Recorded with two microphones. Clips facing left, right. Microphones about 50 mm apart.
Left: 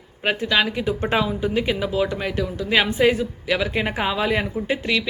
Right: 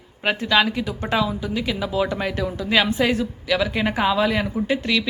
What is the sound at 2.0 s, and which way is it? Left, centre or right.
Speech, centre.